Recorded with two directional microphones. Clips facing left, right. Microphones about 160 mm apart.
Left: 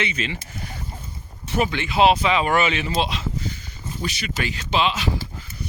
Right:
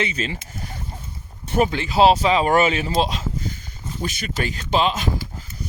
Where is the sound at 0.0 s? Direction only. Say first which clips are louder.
Right 2 dB; 35° right (ahead or behind).